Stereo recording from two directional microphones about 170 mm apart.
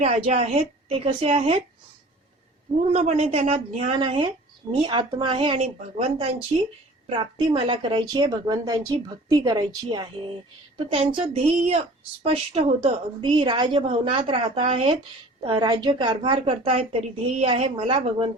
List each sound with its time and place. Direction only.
0.0 s a woman's voice: 35° right (ahead or behind)
3.0 s a woman's voice: 40° right (ahead or behind)